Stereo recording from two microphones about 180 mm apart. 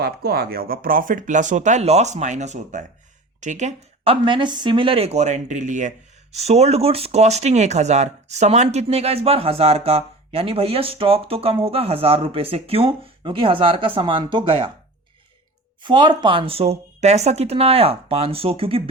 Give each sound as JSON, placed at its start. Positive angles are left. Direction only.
{"t": 0.0, "sound": "speech", "side_deg": -60}
{"t": 15.8, "sound": "speech", "side_deg": -25}